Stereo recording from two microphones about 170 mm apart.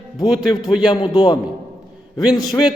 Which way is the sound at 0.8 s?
25° left (ahead or behind).